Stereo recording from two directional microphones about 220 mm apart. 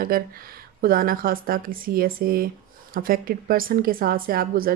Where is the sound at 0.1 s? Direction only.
40° right (ahead or behind).